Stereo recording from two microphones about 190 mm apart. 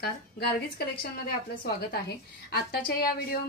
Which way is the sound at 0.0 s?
55° left (ahead or behind).